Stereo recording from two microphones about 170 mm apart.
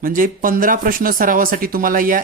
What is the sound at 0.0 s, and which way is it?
Speech, 55° right (ahead or behind).